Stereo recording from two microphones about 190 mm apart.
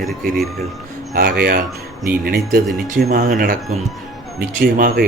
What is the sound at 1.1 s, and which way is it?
A man's voice, 55° right (ahead or behind).